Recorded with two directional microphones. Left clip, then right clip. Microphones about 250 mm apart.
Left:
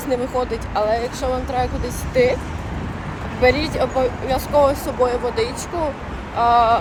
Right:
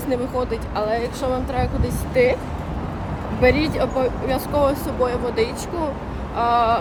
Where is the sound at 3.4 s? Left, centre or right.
Centre.